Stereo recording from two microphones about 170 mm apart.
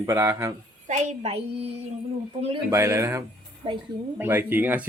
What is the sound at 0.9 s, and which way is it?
Speech, 40° right (ahead or behind).